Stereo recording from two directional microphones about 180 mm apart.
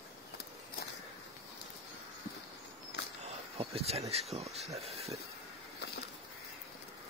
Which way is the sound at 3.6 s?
35° right (ahead or behind).